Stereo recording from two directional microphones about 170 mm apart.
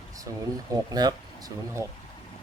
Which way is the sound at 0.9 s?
25° right (ahead or behind).